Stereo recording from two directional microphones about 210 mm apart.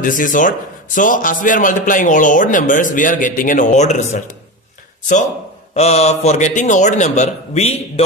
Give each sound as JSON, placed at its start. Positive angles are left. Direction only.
{"t": 0.0, "sound": "a man's voice", "side_deg": 40}
{"t": 5.8, "sound": "a man's voice", "side_deg": 30}